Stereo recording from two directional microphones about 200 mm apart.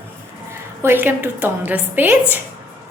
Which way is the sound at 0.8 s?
10° right (ahead or behind).